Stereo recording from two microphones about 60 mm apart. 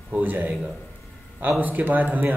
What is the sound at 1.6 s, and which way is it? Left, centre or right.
Speech, right.